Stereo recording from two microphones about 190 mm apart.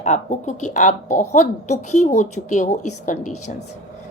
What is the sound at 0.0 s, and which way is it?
A woman's voice, 40° left (ahead or behind).